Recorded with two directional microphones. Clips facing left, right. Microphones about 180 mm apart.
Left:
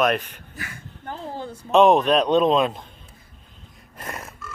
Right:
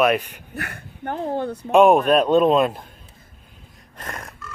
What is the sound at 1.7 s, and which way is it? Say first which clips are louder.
A man's voice: right 2 dB; 10° right (ahead or behind).